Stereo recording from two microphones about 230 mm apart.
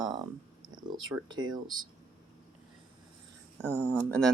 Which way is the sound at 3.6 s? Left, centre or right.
Centre.